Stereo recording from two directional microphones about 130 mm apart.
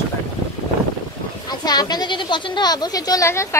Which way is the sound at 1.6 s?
30° left (ahead or behind).